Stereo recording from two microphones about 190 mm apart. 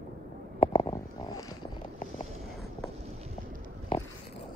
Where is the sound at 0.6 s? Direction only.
30° left (ahead or behind).